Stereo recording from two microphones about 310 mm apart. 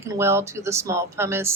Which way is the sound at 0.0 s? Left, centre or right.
Centre.